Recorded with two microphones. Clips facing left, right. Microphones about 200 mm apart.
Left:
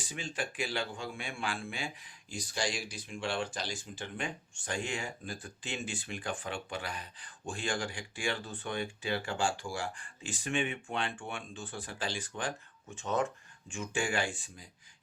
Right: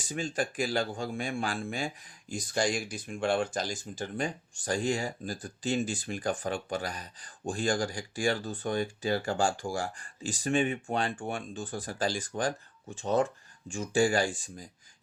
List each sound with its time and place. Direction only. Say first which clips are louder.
0.0 s speech: right 6 dB; 45° right (ahead or behind)